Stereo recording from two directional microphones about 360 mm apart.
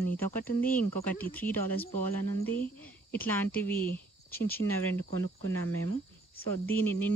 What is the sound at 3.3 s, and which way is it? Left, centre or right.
Speech, centre.